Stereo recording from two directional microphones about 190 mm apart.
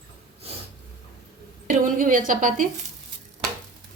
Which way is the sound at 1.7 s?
45° right (ahead or behind).